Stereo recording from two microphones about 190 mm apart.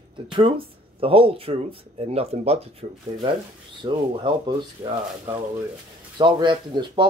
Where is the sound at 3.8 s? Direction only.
20° right (ahead or behind).